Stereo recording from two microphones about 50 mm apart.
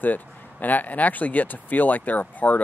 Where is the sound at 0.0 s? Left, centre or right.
Left.